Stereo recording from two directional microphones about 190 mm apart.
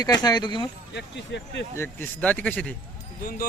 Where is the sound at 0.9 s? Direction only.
65° left (ahead or behind).